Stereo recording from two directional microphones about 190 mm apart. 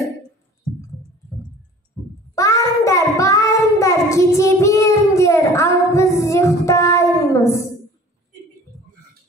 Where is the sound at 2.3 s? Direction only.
15° left (ahead or behind).